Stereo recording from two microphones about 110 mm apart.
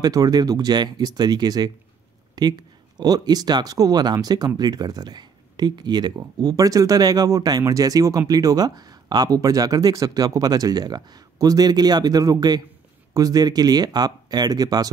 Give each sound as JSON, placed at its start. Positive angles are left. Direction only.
{"t": 0.0, "sound": "speech", "side_deg": -35}